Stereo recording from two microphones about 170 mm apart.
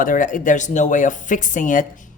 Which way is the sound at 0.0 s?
50° left (ahead or behind).